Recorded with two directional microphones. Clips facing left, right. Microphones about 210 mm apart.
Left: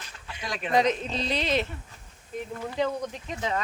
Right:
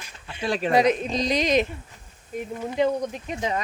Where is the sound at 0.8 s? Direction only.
10° right (ahead or behind).